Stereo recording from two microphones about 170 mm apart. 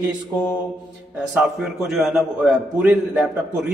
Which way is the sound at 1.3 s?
Centre (ahead or behind).